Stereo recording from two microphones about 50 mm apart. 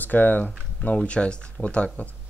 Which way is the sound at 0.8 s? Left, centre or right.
Left.